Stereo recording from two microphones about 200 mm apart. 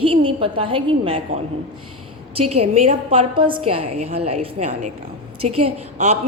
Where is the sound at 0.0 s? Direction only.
25° right (ahead or behind).